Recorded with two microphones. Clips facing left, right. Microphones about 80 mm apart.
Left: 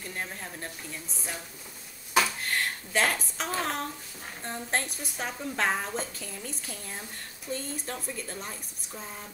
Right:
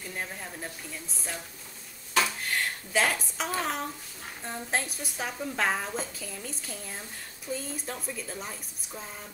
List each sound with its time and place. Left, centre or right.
0.0 s a woman's voice: centre
2.2 s a woman's voice: centre